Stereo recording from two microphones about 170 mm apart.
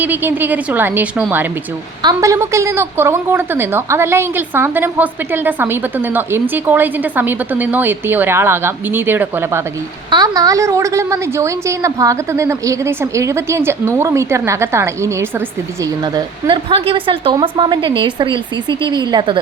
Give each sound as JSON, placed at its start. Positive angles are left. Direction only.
{"t": 0.0, "sound": "a woman's voice", "side_deg": -10}
{"t": 2.0, "sound": "a woman's voice", "side_deg": -20}